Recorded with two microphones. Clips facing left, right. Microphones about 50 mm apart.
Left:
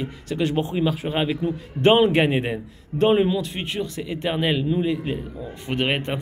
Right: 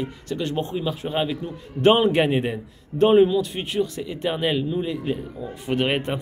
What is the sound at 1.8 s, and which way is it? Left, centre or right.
A man's voice, centre.